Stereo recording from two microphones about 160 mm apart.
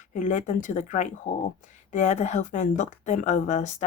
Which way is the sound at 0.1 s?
50° left (ahead or behind).